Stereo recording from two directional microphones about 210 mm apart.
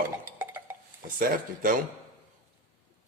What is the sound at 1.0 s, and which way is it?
Speech, 40° right (ahead or behind).